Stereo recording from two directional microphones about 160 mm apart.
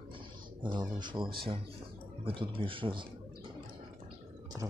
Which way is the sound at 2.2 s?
30° right (ahead or behind).